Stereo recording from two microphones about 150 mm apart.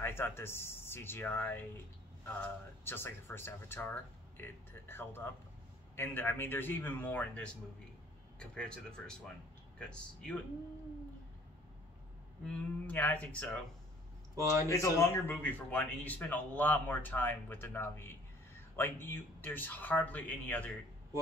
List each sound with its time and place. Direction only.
0.0 s speech: 15° left (ahead or behind)
12.4 s speech: 10° left (ahead or behind)
14.3 s speech: 20° right (ahead or behind)
14.7 s speech: 20° left (ahead or behind)